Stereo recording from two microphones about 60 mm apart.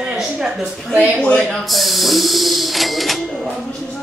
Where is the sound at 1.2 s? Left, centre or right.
Centre.